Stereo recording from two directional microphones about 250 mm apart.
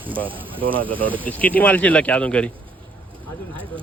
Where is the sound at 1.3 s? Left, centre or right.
Centre.